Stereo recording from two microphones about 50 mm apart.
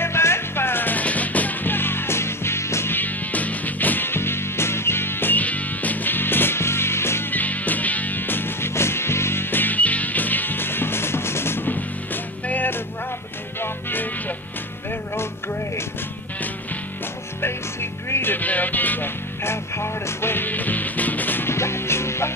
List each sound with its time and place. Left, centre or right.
0.0 s music: left
2.9 s music: left
5.4 s music: left
7.2 s music: left
11.7 s music: left
18.1 s music: left
18.4 s music: left
19.4 s music: left
21.5 s music: left